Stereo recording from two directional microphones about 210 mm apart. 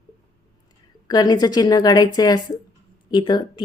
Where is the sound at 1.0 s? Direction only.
20° left (ahead or behind).